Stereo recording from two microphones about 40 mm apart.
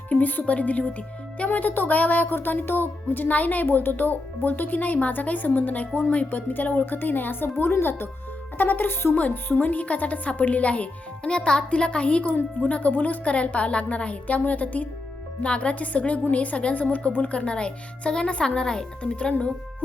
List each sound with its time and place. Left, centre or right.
0.1 s speech: left
3.7 s speech: left
6.5 s speech: left
7.6 s speech: left
8.5 s speech: left
9.6 s speech: left
17.3 s speech: left